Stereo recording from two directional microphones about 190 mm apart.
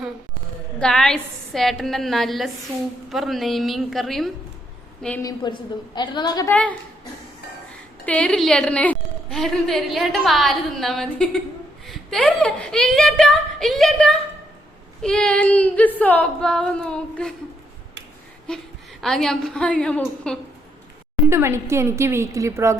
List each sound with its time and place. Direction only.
0.8 s a woman's voice: 5° left (ahead or behind)
5.2 s a woman's voice: 25° left (ahead or behind)
6.5 s a woman's voice: 10° left (ahead or behind)
8.0 s a woman's voice: 5° left (ahead or behind)
18.5 s a woman's voice: 5° left (ahead or behind)
21.2 s a woman's voice: 15° right (ahead or behind)